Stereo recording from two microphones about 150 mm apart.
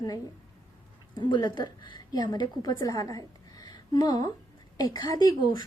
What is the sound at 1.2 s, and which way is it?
A woman's voice, 30° left (ahead or behind).